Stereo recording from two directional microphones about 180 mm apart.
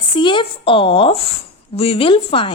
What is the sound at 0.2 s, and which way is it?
A woman's voice, 25° left (ahead or behind).